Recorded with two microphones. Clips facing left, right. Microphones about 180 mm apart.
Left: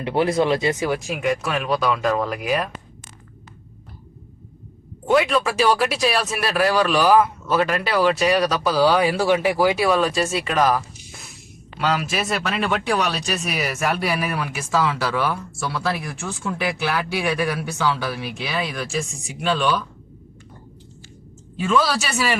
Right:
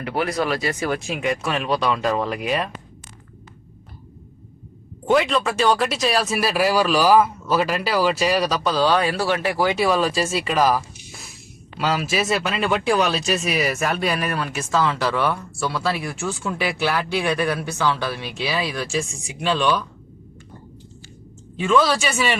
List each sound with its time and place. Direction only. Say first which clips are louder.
0.0 s speech: left 4 dB; 25° left (ahead or behind)
1.0 s speech: left 1 dB; centre (ahead or behind)
5.0 s speech: even; centre (ahead or behind)
21.5 s speech: right 2 dB; 5° left (ahead or behind)